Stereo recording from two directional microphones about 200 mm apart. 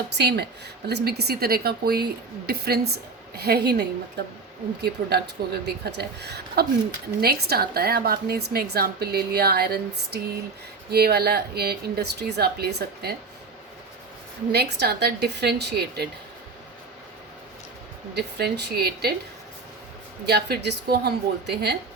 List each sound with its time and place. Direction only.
0.2 s speech: 55° right (ahead or behind)
14.5 s speech: 55° right (ahead or behind)
18.1 s speech: 55° right (ahead or behind)
20.2 s speech: 55° right (ahead or behind)